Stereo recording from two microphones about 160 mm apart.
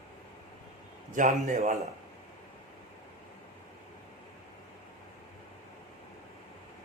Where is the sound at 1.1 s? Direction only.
50° right (ahead or behind).